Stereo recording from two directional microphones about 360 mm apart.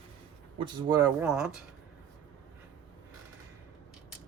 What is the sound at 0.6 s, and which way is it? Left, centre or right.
Speech, centre.